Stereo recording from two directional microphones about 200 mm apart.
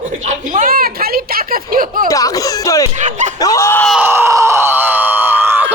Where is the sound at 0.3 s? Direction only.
40° right (ahead or behind).